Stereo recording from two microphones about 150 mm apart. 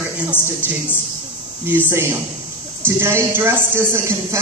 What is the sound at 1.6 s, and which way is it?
A man's voice, 15° right (ahead or behind).